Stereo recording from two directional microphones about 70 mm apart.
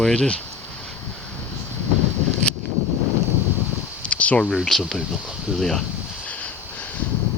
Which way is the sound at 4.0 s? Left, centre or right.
Centre.